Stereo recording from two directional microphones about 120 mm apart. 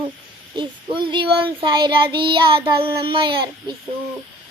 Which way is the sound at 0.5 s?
45° right (ahead or behind).